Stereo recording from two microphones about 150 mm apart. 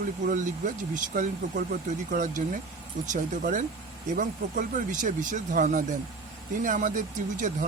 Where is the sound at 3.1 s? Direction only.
60° right (ahead or behind).